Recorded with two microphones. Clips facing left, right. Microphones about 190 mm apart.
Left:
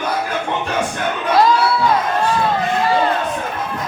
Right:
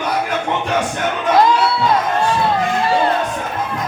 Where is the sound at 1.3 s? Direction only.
20° right (ahead or behind).